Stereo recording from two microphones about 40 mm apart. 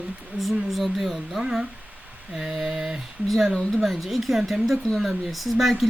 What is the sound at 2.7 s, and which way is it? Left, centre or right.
Speech, centre.